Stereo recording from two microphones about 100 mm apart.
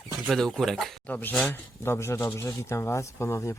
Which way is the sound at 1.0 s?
15° left (ahead or behind).